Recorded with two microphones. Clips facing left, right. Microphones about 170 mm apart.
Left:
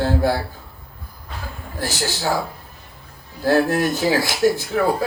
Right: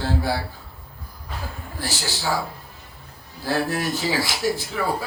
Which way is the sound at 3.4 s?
50° left (ahead or behind).